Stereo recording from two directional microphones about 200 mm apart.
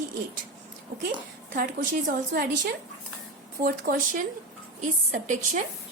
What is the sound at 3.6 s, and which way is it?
Speech, 45° right (ahead or behind).